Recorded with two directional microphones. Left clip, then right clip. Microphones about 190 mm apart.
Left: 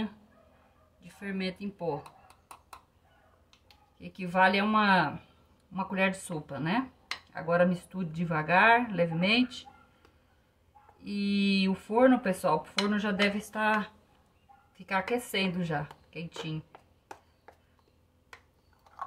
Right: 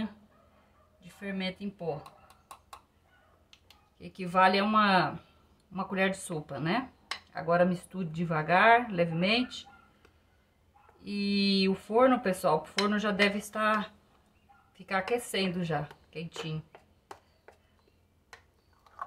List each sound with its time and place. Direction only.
1.0 s a sound: centre (ahead or behind)
4.0 s speech: 20° right (ahead or behind)
11.1 s speech: 10° right (ahead or behind)
14.9 s speech: 10° right (ahead or behind)